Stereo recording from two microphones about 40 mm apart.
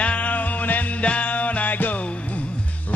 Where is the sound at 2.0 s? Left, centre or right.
Left.